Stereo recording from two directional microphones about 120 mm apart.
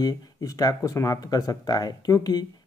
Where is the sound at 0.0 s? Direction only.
30° left (ahead or behind).